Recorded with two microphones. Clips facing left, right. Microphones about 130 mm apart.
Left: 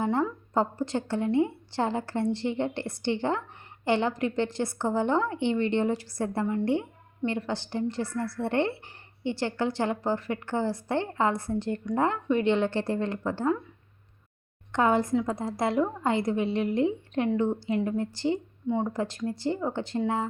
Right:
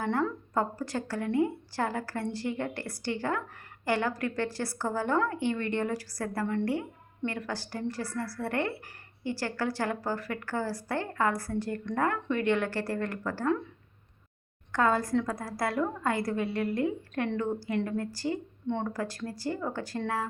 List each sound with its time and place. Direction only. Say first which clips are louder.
0.0 s a woman's voice: left 3 dB; 25° left (ahead or behind)
14.7 s a woman's voice: left 3 dB; 20° left (ahead or behind)